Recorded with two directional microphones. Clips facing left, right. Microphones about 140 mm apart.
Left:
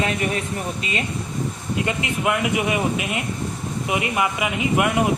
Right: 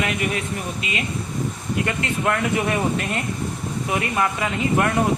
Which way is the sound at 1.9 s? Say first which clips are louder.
Left 1 dB; 15° left (ahead or behind).